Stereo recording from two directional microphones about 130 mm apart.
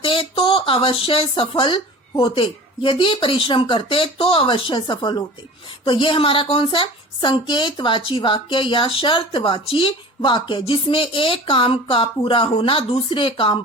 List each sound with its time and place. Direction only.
0.0 s a woman's voice: 40° left (ahead or behind)